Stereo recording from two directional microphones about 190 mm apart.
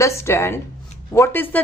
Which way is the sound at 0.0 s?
15° left (ahead or behind).